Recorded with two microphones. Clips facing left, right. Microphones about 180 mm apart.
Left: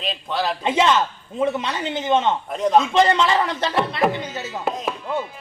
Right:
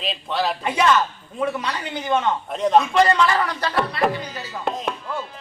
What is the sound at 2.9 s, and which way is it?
A man's voice, 20° left (ahead or behind).